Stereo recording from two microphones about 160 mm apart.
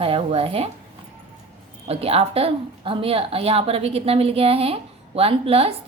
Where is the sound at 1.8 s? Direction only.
40° right (ahead or behind).